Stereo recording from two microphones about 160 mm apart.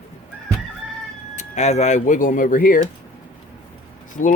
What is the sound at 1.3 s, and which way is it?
Speech, 45° left (ahead or behind).